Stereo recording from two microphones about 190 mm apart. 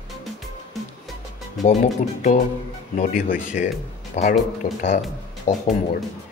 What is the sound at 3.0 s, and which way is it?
Speech, 45° left (ahead or behind).